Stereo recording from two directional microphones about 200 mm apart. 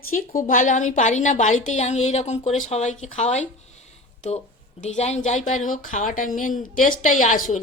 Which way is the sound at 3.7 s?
35° left (ahead or behind).